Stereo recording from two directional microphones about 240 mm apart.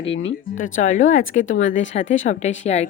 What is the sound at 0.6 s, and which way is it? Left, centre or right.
Speech, left.